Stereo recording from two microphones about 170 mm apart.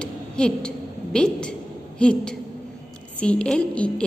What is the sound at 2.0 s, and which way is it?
A woman's voice, 5° left (ahead or behind).